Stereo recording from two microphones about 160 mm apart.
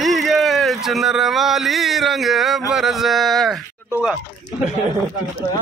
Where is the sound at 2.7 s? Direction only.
Centre (ahead or behind).